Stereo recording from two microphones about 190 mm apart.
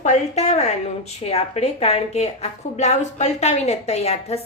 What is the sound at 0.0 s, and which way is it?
A woman's voice, 35° left (ahead or behind).